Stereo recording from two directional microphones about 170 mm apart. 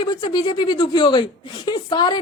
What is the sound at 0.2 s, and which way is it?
A woman's voice, 25° left (ahead or behind).